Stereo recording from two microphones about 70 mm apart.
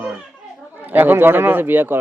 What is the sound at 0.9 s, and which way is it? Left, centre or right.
Speech, right.